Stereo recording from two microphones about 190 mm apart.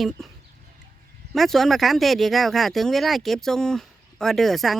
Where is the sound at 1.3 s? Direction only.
Centre (ahead or behind).